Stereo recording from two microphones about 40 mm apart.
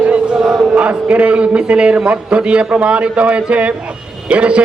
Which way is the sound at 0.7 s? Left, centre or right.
Right.